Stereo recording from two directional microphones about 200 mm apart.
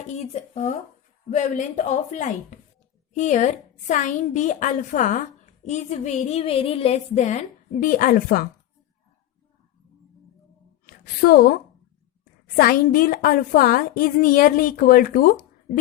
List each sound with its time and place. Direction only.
0.1 s a woman's voice: 35° left (ahead or behind)
10.8 s a woman's voice: 45° left (ahead or behind)
12.5 s speech: 50° left (ahead or behind)